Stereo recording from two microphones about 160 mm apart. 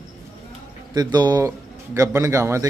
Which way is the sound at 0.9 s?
25° right (ahead or behind).